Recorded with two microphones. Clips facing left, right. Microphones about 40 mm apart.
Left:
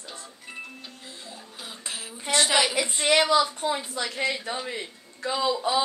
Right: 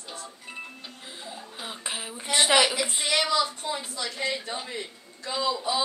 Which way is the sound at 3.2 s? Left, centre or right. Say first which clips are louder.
Left 3 dB; centre.